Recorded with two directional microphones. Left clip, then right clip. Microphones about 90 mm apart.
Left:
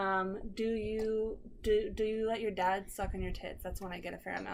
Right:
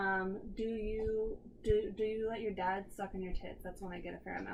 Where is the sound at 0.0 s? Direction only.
20° left (ahead or behind).